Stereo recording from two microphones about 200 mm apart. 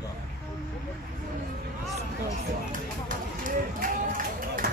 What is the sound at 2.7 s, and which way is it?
Run, 40° right (ahead or behind).